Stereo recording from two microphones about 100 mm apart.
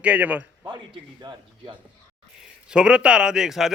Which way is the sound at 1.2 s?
45° right (ahead or behind).